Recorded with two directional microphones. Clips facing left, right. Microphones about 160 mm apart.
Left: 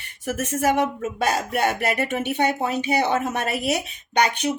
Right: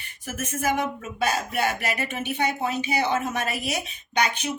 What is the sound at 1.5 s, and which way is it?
A woman's voice, 60° left (ahead or behind).